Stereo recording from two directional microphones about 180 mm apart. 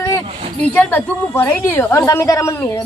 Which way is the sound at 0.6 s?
10° left (ahead or behind).